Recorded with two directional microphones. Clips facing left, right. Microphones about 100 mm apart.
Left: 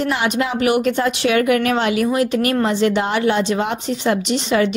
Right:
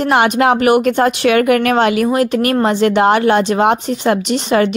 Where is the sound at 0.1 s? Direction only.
65° right (ahead or behind).